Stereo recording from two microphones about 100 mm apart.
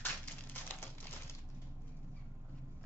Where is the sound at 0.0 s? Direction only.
20° left (ahead or behind).